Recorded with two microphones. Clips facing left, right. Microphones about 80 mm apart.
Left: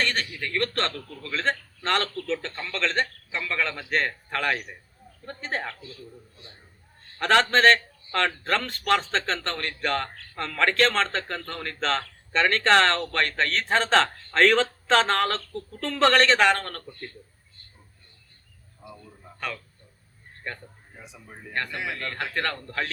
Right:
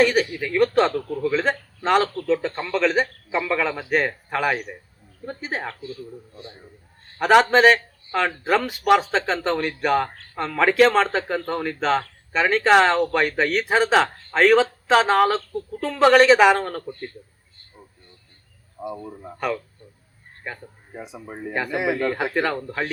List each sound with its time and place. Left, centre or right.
0.0 s a sound: centre
0.3 s speech: centre
2.5 s speech: right
2.7 s speech: centre
5.6 s a man's voice: right
7.2 s speech: centre
16.8 s a man's voice: right
19.0 s speech: right
20.4 s speech: centre
21.2 s speech: right
21.5 s speech: centre